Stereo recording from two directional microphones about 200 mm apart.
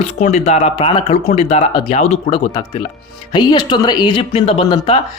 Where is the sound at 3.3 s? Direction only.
20° left (ahead or behind).